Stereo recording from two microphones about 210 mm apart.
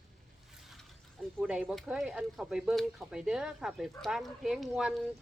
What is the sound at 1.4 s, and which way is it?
Speech, 5° right (ahead or behind).